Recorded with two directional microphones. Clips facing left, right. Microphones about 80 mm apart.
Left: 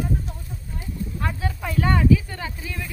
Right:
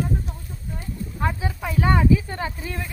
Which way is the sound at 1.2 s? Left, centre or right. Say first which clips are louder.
Right 4 dB; centre.